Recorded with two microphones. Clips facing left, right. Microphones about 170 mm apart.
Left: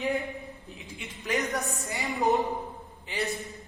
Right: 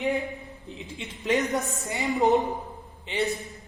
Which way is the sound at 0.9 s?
25° right (ahead or behind).